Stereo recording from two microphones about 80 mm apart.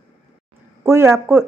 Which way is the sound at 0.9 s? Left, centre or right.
Right.